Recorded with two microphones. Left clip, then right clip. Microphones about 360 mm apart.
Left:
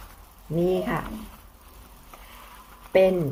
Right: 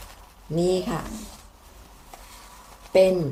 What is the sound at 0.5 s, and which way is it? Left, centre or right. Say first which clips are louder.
Speech: right 1 dB; centre.